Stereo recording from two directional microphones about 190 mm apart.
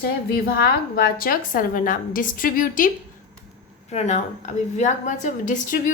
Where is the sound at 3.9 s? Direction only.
35° left (ahead or behind).